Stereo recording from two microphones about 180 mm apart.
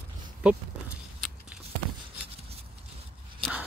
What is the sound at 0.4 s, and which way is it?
Speech, 5° right (ahead or behind).